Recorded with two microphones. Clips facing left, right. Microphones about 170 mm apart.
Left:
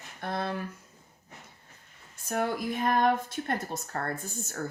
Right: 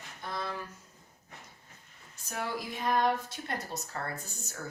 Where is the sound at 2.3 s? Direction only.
50° left (ahead or behind).